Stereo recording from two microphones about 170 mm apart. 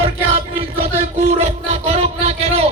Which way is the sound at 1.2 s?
40° right (ahead or behind).